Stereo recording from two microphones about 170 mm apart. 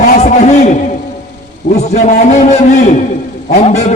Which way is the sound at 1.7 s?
45° left (ahead or behind).